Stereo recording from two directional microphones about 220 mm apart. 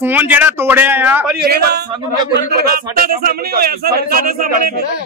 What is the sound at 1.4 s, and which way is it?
Speech, 45° right (ahead or behind).